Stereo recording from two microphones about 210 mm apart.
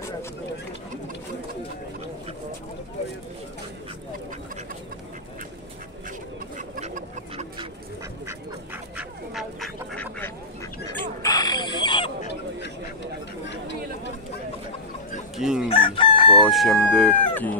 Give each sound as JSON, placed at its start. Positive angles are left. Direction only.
{"t": 6.8, "sound": "chicken", "side_deg": -30}
{"t": 8.9, "sound": "duck", "side_deg": 0}
{"t": 11.2, "sound": "a sound", "side_deg": 20}
{"t": 15.3, "sound": "chicken", "side_deg": -5}
{"t": 15.7, "sound": "chicken", "side_deg": 25}
{"t": 16.4, "sound": "speech", "side_deg": 0}